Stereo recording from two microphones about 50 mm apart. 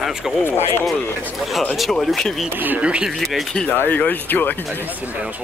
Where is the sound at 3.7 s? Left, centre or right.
Left.